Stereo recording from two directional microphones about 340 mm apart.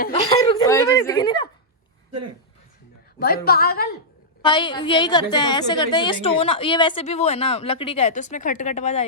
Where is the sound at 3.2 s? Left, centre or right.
Left.